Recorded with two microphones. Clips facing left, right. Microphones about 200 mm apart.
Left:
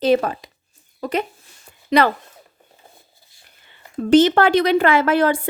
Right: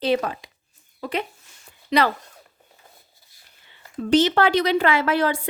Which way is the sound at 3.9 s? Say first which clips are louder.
Left 5 dB; 45° left (ahead or behind).